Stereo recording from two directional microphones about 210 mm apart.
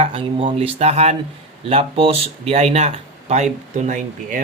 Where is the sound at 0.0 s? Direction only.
25° right (ahead or behind).